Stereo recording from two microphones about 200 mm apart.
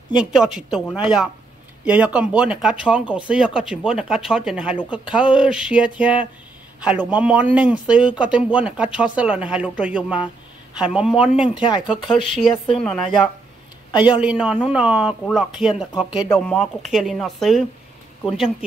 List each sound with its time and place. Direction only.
0.6 s speech: centre (ahead or behind)
11.5 s speech: 20° left (ahead or behind)
12.3 s speech: centre (ahead or behind)
13.9 s speech: 25° left (ahead or behind)
14.2 s speech: 5° right (ahead or behind)